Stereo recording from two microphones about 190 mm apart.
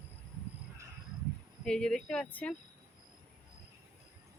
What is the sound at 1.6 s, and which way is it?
Speech, 5° left (ahead or behind).